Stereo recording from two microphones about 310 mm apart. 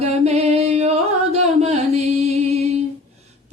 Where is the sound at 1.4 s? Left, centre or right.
Right.